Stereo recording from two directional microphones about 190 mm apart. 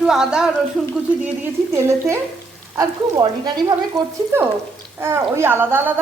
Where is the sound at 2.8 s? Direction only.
20° right (ahead or behind).